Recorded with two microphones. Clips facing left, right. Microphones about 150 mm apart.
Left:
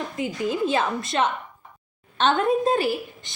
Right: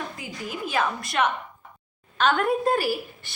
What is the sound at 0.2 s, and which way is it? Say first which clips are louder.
A woman's voice: left 9 dB; 25° left (ahead or behind).